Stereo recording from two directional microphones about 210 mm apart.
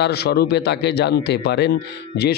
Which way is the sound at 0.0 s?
50° left (ahead or behind).